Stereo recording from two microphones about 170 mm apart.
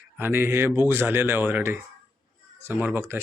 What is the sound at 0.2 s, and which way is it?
Speech, 15° right (ahead or behind).